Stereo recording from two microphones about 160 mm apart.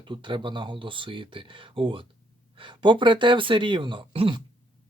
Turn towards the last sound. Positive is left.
turn(degrees=-35)  # may be behind; listen again after turning